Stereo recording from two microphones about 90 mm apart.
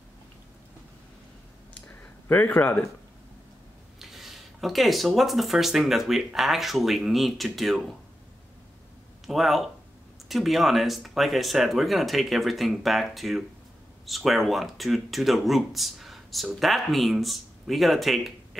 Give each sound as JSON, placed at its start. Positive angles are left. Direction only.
{"t": 1.7, "sound": "a sound", "side_deg": 20}
{"t": 4.0, "sound": "speech", "side_deg": -5}
{"t": 9.2, "sound": "speech", "side_deg": 0}